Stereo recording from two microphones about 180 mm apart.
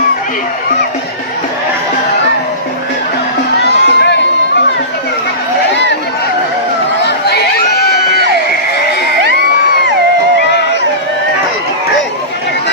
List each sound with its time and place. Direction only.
3.6 s music: 75° left (ahead or behind)
5.7 s a sound: 80° left
7.2 s crowd: 65° left (ahead or behind)